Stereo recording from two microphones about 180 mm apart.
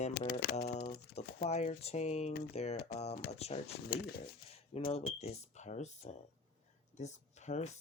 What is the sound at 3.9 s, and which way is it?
Typewriter, 60° left (ahead or behind).